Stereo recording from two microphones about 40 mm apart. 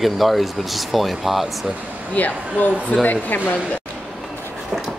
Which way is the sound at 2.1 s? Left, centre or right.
Left.